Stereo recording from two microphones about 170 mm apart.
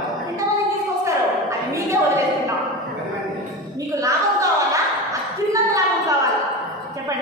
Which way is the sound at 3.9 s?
20° right (ahead or behind).